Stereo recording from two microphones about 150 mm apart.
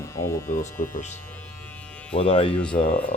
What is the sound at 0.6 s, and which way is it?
Speech, 65° left (ahead or behind).